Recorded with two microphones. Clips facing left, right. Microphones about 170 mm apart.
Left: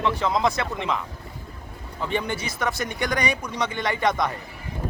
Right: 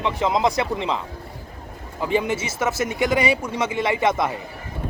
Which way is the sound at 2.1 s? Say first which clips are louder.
Right 5 dB; 5° right (ahead or behind).